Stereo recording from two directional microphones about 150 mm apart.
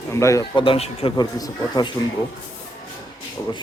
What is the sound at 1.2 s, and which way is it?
Speech, 25° left (ahead or behind).